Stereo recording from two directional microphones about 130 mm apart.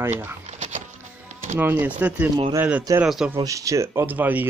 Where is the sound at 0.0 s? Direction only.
15° right (ahead or behind).